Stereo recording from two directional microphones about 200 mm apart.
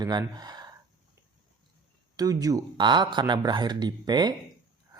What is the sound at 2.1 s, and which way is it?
Speech, 20° right (ahead or behind).